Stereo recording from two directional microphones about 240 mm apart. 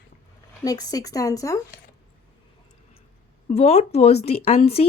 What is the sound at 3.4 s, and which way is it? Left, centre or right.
A woman's voice, left.